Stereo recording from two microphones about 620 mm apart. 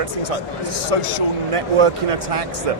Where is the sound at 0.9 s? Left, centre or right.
Right.